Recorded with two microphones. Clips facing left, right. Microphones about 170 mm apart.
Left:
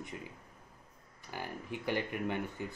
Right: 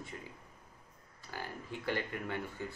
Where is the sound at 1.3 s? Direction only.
15° left (ahead or behind).